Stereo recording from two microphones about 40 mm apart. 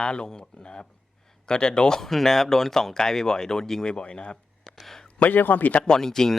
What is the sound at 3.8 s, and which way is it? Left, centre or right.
Speech, left.